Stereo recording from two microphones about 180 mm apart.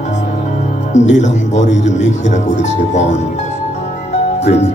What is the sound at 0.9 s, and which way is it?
Speech, 40° left (ahead or behind).